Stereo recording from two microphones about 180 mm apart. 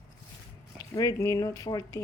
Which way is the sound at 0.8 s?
15° left (ahead or behind).